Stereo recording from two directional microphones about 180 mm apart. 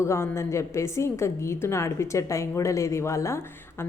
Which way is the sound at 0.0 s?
15° left (ahead or behind).